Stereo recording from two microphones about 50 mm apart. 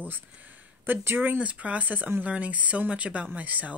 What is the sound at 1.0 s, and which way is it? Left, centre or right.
Speech, right.